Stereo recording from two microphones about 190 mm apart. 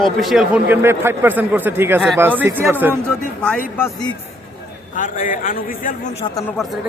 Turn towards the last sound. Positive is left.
turn(degrees=0)  # may be behind; listen again after turning